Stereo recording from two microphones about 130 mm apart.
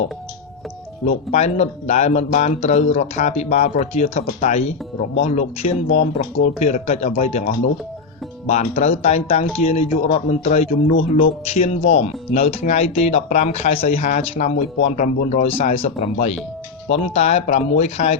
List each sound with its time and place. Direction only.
1.0 s speech: 60° left (ahead or behind)